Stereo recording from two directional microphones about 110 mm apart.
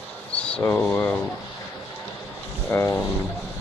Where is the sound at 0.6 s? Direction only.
20° left (ahead or behind).